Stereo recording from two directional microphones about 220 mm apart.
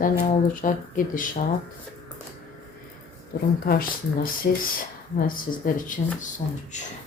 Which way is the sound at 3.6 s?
40° left (ahead or behind).